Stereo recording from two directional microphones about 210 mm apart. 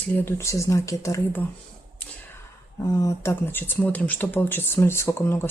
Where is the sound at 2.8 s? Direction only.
15° left (ahead or behind).